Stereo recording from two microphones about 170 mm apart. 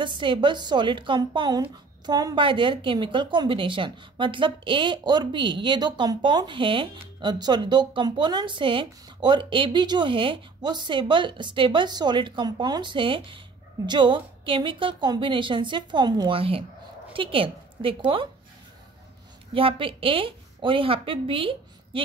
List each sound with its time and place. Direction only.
0.0 s a woman's voice: 30° right (ahead or behind)
19.5 s a woman's voice: 30° right (ahead or behind)